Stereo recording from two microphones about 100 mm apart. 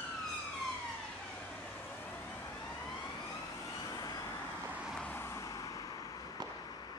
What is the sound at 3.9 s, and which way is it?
Vehicle, 40° left (ahead or behind).